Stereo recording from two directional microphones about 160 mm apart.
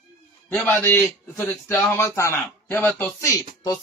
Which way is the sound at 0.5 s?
10° left (ahead or behind).